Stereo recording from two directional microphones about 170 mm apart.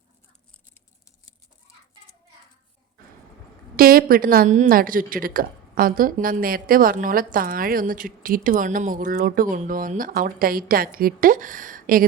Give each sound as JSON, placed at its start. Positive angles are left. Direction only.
{"t": 3.8, "sound": "a woman's voice", "side_deg": -60}